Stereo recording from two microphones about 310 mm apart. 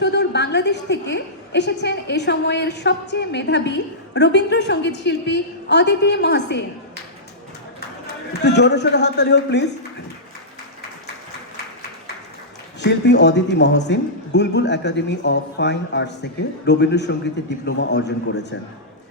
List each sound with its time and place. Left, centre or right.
0.0 s a woman's voice: left
8.0 s a man's voice: left
12.8 s a woman's voice: left